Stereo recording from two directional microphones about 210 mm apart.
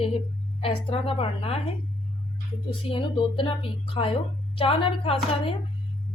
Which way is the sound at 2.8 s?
25° left (ahead or behind).